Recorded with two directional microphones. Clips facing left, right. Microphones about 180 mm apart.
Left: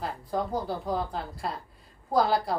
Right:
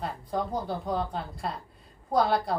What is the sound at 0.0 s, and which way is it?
A woman's voice, centre (ahead or behind).